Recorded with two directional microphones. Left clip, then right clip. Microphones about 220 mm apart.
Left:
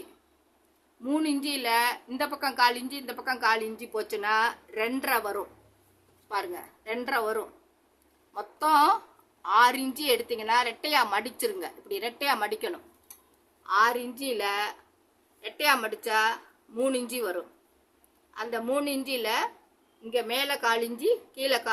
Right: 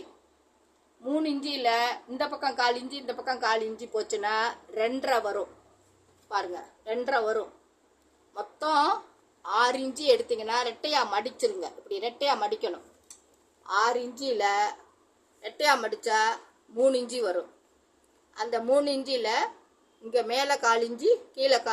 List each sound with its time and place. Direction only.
1.0 s a woman's voice: 30° left (ahead or behind)
6.6 s a woman's voice: 30° left (ahead or behind)